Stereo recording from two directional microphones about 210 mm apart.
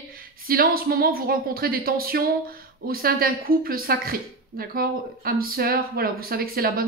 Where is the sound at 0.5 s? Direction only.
45° right (ahead or behind).